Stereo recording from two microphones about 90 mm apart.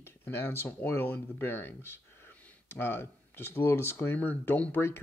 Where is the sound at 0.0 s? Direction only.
25° left (ahead or behind).